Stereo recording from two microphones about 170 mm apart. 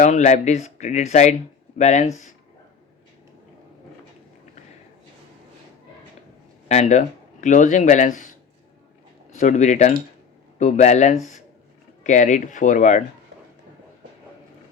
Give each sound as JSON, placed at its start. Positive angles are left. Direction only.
{"t": 0.0, "sound": "speech", "side_deg": 45}
{"t": 6.7, "sound": "speech", "side_deg": 45}